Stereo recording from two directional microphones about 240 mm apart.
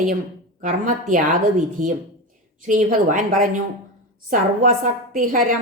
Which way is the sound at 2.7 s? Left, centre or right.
Right.